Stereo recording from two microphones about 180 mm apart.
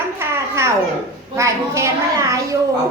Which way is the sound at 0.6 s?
15° right (ahead or behind).